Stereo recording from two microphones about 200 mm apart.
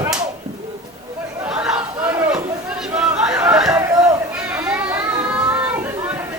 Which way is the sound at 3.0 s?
5° right (ahead or behind).